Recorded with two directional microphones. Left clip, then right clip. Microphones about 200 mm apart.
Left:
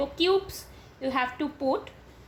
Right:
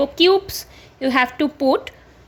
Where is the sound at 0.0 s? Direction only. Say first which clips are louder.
Right 9 dB; 50° right (ahead or behind).